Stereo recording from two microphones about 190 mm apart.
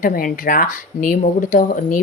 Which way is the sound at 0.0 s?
45° left (ahead or behind).